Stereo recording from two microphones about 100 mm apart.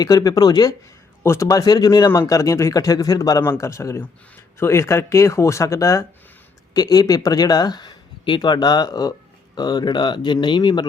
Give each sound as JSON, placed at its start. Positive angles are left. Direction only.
{"t": 0.0, "sound": "speech", "side_deg": 40}
{"t": 1.2, "sound": "speech", "side_deg": 25}